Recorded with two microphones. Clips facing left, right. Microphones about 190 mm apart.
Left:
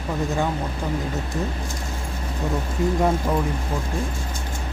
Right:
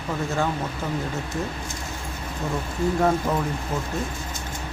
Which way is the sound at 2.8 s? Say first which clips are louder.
Even; 15° left (ahead or behind).